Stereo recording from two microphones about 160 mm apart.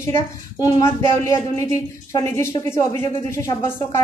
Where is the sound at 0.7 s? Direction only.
20° left (ahead or behind).